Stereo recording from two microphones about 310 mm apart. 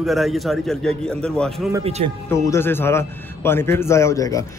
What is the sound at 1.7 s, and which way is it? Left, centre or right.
Speech, centre.